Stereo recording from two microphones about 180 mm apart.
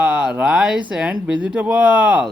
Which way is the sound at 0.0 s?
5° right (ahead or behind).